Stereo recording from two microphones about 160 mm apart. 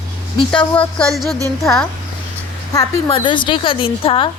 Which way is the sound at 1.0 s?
Centre (ahead or behind).